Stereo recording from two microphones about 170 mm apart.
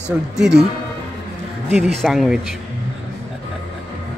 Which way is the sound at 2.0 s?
Centre (ahead or behind).